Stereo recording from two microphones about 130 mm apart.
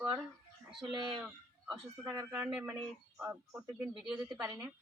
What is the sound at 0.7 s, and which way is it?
Speech, centre (ahead or behind).